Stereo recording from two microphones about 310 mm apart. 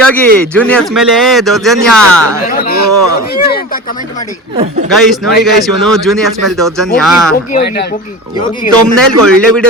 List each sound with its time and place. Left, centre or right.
0.0 s a man's voice: centre
2.5 s speech: left
4.9 s a man's voice: centre
7.5 s speech: left
9.0 s a man's voice: centre